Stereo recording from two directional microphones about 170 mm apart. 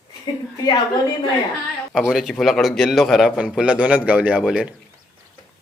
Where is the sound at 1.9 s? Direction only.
Centre (ahead or behind).